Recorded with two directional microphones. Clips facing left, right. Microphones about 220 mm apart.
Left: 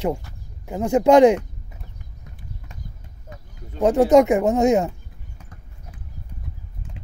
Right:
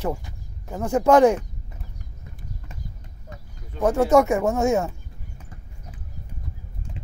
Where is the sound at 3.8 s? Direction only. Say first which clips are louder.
Left 3 dB; 15° left (ahead or behind).